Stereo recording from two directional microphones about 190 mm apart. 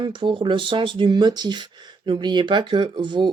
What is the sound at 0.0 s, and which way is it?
Speech, 25° right (ahead or behind).